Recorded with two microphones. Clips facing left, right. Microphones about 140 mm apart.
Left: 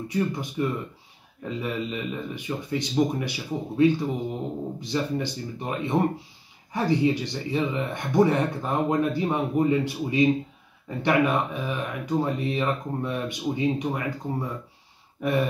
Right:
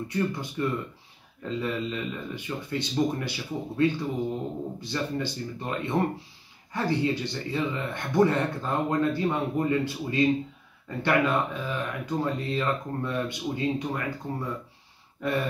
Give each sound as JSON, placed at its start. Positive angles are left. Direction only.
{"t": 0.1, "sound": "speech", "side_deg": 15}